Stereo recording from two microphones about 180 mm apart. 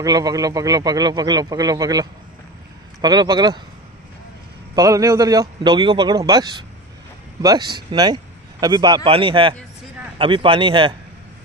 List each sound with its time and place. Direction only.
0.0 s a man's voice: 20° right (ahead or behind)
4.7 s a man's voice: 20° right (ahead or behind)
7.4 s a man's voice: 25° right (ahead or behind)